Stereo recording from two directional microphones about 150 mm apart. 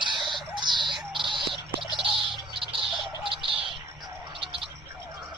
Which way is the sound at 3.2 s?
35° right (ahead or behind).